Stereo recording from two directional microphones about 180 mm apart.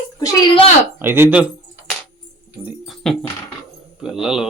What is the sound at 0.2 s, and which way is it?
Speech, 25° left (ahead or behind).